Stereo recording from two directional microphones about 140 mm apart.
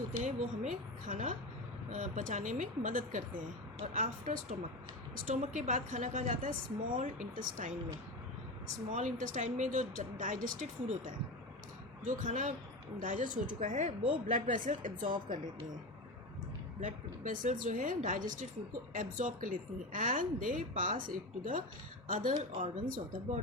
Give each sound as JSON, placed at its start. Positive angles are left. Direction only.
{"t": 0.3, "sound": "a woman's voice", "side_deg": -60}
{"t": 8.9, "sound": "a woman's voice", "side_deg": -60}
{"t": 14.0, "sound": "speech", "side_deg": -35}
{"t": 14.3, "sound": "speech", "side_deg": -70}
{"t": 16.8, "sound": "speech", "side_deg": -65}
{"t": 22.0, "sound": "speech", "side_deg": -75}
{"t": 22.6, "sound": "a woman's voice", "side_deg": -60}